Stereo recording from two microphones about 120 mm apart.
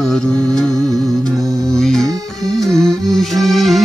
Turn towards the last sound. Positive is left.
turn(degrees=0)  # may be behind; listen again after turning